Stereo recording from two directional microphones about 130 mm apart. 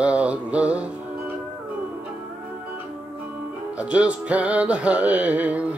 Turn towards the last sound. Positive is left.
turn(degrees=-10)  # may be behind; listen again after turning